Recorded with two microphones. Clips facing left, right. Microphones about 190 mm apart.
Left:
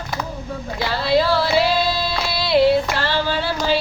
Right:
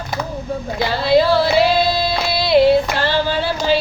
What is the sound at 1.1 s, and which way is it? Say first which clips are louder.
Female singing: right 4 dB; 20° right (ahead or behind).